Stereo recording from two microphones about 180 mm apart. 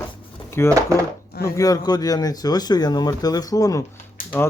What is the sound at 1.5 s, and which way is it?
Speech, 20° left (ahead or behind).